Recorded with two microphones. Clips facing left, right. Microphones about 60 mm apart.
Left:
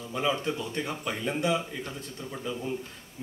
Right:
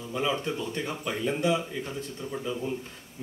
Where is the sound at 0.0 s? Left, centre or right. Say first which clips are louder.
Even; centre.